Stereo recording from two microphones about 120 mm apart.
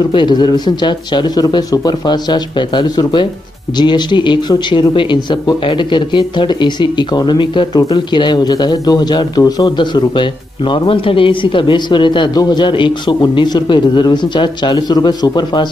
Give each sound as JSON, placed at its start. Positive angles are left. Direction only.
{"t": 0.1, "sound": "speech", "side_deg": 40}